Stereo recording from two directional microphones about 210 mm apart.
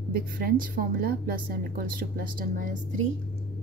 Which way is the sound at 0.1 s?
45° right (ahead or behind).